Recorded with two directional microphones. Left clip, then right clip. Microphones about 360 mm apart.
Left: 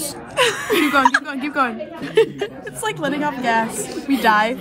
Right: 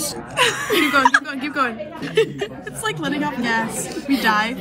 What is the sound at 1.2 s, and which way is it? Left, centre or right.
A woman's voice, centre.